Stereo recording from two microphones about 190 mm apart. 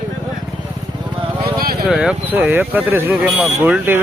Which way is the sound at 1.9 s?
5° right (ahead or behind).